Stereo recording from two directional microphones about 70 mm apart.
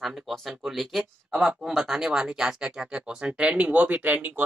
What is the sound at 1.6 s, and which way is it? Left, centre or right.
Speech, centre.